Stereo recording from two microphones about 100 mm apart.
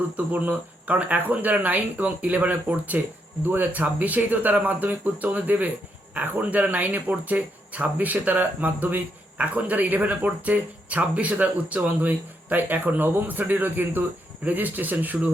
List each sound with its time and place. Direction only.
0.3 s speech: 15° right (ahead or behind)